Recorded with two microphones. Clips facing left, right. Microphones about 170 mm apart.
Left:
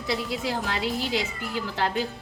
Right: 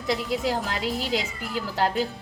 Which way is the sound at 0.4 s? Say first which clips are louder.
Right 1 dB; 40° right (ahead or behind).